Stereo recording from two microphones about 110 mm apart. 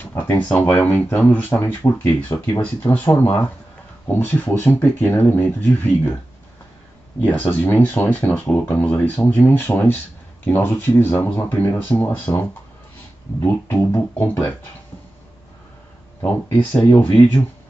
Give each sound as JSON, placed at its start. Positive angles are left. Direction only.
{"t": 0.0, "sound": "a sound", "side_deg": 25}
{"t": 0.5, "sound": "speech", "side_deg": 10}
{"t": 2.3, "sound": "speech", "side_deg": 35}
{"t": 2.6, "sound": "speech", "side_deg": 15}
{"t": 7.2, "sound": "speech", "side_deg": 15}
{"t": 16.8, "sound": "speech", "side_deg": 15}